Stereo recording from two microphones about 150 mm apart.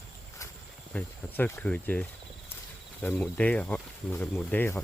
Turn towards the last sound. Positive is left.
turn(degrees=15)  # may be behind; listen again after turning